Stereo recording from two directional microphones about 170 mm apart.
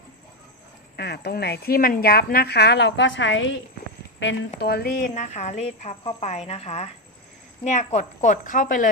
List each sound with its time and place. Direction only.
0.9 s a woman's voice: 75° left (ahead or behind); by 8.9 s 50° left (ahead or behind)